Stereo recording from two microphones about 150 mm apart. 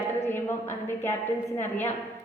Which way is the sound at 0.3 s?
15° left (ahead or behind).